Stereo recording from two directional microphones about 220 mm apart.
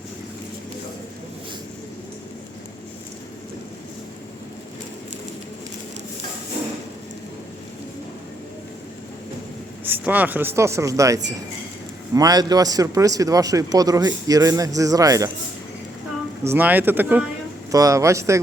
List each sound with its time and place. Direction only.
9.8 s a man's voice: 10° right (ahead or behind)
16.5 s a man's voice: 10° right (ahead or behind)